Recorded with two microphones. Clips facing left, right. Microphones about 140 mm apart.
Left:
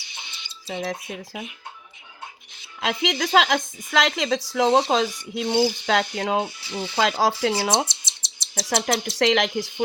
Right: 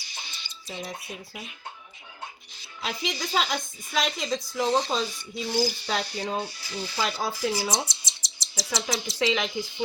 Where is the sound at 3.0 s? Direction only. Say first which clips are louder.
Left 8 dB; 80° left.